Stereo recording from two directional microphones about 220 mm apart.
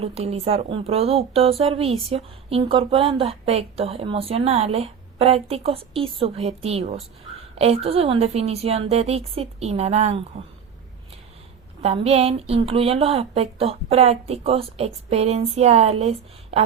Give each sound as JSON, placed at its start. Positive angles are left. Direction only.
{"t": 0.0, "sound": "speech", "side_deg": -25}
{"t": 11.8, "sound": "speech", "side_deg": -30}